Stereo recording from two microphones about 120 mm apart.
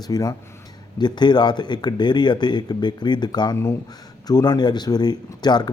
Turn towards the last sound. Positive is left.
turn(degrees=35)  # may be behind; listen again after turning